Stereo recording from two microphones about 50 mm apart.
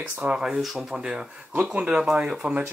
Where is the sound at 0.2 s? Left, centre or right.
Right.